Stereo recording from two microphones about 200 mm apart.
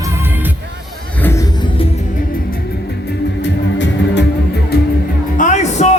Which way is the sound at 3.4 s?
65° left (ahead or behind).